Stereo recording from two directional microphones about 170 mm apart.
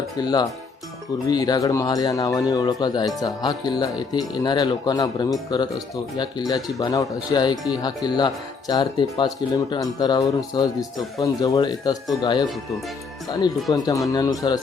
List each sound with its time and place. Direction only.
0.2 s speech: 25° left (ahead or behind)